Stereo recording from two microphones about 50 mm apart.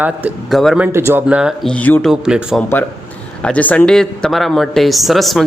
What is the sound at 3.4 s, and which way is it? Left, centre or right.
Speech, left.